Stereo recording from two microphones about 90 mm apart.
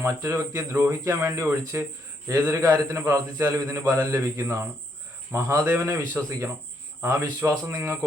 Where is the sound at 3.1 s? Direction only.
30° right (ahead or behind).